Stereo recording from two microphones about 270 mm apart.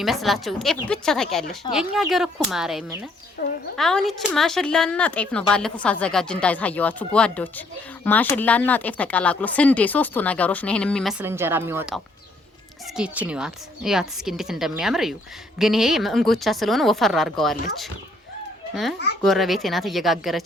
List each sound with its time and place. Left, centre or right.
0.0 s speech: centre
3.4 s speech: left
3.8 s speech: centre
13.0 s speech: centre